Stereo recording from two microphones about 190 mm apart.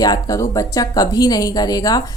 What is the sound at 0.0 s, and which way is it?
A woman's voice, 20° left (ahead or behind).